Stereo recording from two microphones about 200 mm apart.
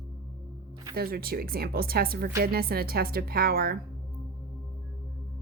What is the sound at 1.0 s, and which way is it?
A woman's voice, 50° right (ahead or behind).